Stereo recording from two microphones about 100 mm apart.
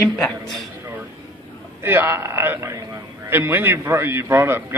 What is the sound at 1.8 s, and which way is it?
A man's voice, 20° right (ahead or behind).